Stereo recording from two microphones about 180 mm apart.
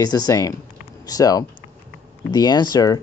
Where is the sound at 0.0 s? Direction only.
20° left (ahead or behind).